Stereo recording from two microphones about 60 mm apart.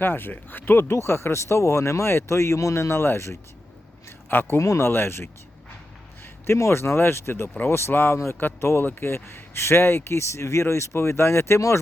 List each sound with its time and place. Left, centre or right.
0.0 s a man's voice: left
4.6 s speech: left
4.9 s speech: left
6.4 s a man's voice: left